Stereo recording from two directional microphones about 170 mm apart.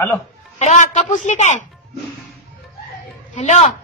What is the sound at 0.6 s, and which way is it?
A woman's voice, 40° left (ahead or behind).